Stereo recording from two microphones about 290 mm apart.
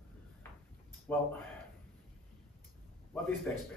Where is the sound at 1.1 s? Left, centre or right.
Centre.